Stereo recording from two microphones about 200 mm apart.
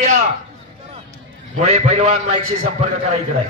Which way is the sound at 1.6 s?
30° right (ahead or behind).